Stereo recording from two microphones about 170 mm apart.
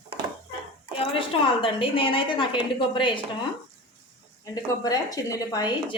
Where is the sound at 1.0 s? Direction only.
30° left (ahead or behind).